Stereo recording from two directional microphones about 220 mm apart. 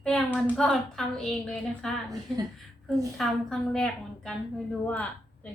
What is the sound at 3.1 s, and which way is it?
A woman's voice, centre (ahead or behind).